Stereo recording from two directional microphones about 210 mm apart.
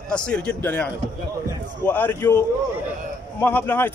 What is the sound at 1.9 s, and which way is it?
Speech, 10° left (ahead or behind).